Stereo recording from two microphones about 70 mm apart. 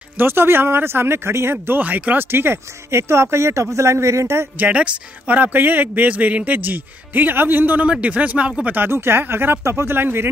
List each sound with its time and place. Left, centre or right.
0.2 s speech: right
1.8 s a man's voice: right
2.3 s a man's voice: right
4.6 s a man's voice: centre
8.7 s speech: right